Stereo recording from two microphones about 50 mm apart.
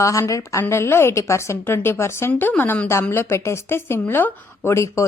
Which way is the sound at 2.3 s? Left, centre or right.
Left.